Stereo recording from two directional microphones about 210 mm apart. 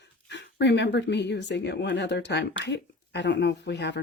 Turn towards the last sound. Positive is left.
turn(degrees=55)  # may be behind; listen again after turning